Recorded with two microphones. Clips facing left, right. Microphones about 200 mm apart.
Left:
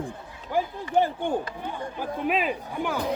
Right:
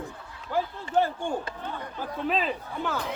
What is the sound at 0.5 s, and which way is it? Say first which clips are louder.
Speech: left 2 dB; 15° left (ahead or behind).